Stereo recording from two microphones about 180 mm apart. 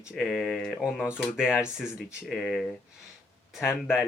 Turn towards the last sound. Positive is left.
turn(degrees=-5)  # may be behind; listen again after turning